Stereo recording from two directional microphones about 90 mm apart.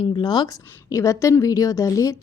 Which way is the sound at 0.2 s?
50° left (ahead or behind).